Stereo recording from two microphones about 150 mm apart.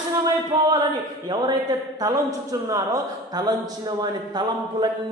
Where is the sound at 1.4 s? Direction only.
25° right (ahead or behind).